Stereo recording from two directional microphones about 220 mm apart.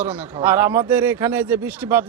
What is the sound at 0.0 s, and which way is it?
Speech, 10° right (ahead or behind).